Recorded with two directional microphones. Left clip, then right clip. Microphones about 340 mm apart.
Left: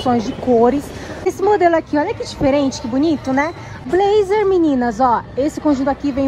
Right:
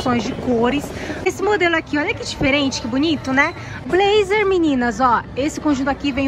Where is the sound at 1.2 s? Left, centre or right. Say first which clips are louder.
Left 4 dB; centre.